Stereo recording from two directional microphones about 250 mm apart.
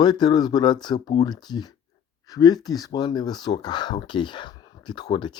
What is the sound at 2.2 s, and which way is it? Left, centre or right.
Speech, centre.